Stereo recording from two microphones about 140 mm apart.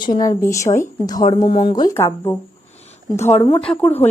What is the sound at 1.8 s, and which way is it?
Speech, 20° left (ahead or behind).